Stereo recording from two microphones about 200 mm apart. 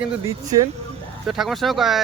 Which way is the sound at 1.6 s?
Centre (ahead or behind).